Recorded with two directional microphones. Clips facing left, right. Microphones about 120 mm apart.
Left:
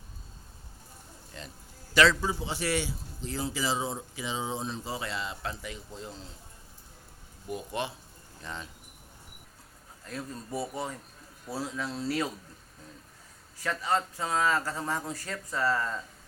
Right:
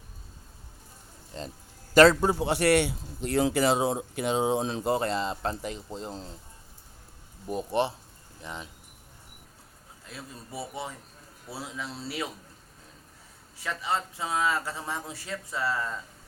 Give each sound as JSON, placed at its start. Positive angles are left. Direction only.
{"t": 1.3, "sound": "a sound", "side_deg": -25}
{"t": 1.9, "sound": "a man's voice", "side_deg": -50}
{"t": 7.4, "sound": "speech", "side_deg": -30}
{"t": 8.4, "sound": "speech", "side_deg": -15}
{"t": 10.1, "sound": "speech", "side_deg": -5}
{"t": 13.6, "sound": "speech", "side_deg": -5}